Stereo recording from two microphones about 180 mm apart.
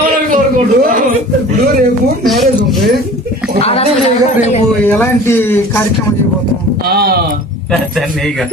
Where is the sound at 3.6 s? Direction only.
35° left (ahead or behind).